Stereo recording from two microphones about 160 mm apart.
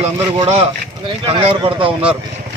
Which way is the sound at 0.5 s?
35° right (ahead or behind).